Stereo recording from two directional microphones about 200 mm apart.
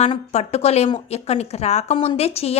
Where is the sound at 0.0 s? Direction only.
30° left (ahead or behind).